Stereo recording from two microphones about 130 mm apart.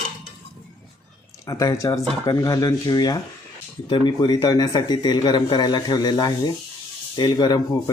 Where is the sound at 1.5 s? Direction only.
25° left (ahead or behind).